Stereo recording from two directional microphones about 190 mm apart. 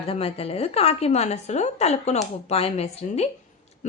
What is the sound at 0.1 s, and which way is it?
A woman's voice, 30° left (ahead or behind).